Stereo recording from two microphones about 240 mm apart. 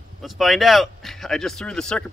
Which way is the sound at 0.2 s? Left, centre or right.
Centre.